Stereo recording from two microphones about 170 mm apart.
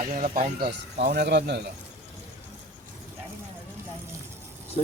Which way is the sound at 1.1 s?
75° right (ahead or behind).